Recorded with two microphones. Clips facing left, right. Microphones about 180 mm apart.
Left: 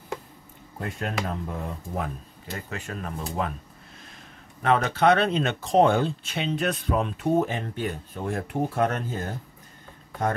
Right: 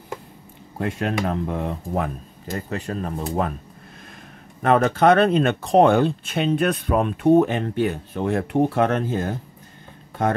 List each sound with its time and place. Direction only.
0.7 s speech: 85° right
2.4 s speech: 40° right (ahead or behind)
4.6 s speech: 50° right (ahead or behind); by 9.3 s 90° right